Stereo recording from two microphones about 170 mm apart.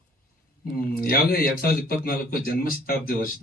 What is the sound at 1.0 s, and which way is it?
A man's voice, 60° left (ahead or behind).